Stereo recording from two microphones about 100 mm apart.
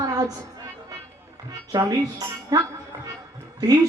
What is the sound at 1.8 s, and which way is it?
Speech, 30° right (ahead or behind).